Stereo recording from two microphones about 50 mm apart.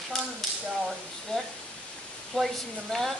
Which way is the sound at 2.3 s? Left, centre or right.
Centre.